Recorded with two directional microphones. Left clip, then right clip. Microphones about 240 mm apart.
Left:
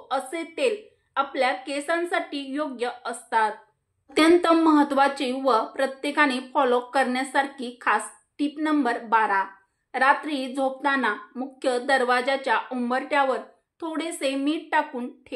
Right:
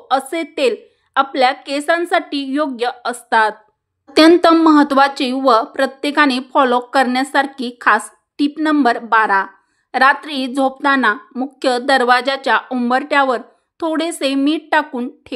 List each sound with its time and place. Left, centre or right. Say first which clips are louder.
0.1 s speech: right 10 dB; right